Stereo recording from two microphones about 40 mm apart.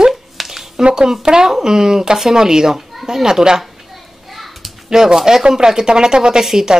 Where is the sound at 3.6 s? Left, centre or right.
Centre.